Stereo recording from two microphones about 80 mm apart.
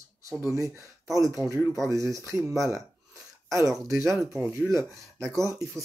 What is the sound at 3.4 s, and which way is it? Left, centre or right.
Speech, right.